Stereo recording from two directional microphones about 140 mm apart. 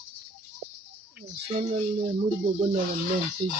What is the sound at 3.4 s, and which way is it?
Speech, 35° right (ahead or behind).